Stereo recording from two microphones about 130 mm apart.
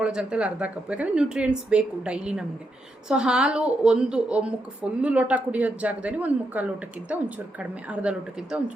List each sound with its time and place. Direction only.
0.0 s a woman's voice: 5° right (ahead or behind)